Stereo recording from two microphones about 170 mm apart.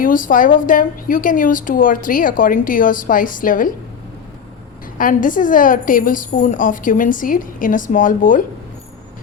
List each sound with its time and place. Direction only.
0.0 s a woman's voice: 55° left (ahead or behind)
4.9 s a woman's voice: 55° left (ahead or behind)